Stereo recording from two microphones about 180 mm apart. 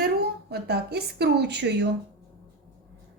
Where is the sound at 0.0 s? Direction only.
60° right (ahead or behind).